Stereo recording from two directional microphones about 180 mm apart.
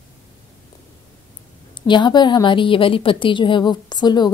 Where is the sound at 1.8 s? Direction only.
25° left (ahead or behind).